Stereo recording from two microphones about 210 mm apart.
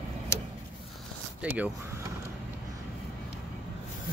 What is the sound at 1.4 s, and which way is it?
Speech, 5° right (ahead or behind).